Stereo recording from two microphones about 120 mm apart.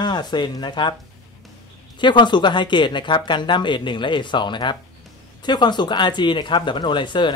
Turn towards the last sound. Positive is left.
turn(degrees=40)  # may be behind; listen again after turning